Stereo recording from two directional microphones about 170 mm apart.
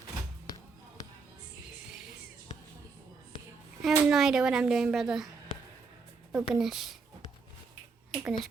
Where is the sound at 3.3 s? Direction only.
30° left (ahead or behind).